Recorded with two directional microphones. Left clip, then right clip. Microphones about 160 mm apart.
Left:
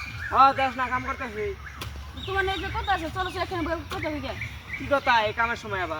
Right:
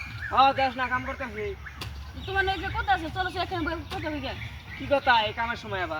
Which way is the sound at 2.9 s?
5° right (ahead or behind).